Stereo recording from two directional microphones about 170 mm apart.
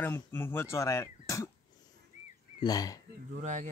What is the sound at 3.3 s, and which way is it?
Speech, 45° right (ahead or behind).